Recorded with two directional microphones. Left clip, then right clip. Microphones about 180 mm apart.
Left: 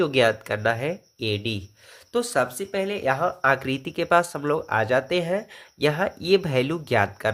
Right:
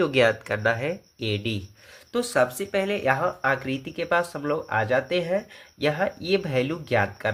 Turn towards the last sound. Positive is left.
turn(degrees=30)  # may be behind; listen again after turning